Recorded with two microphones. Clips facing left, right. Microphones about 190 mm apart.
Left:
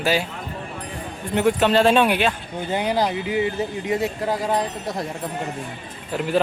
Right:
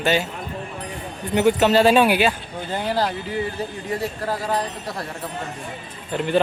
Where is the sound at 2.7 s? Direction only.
15° left (ahead or behind).